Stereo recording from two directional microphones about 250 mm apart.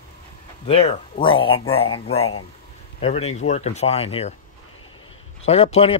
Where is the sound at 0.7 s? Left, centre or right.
Left.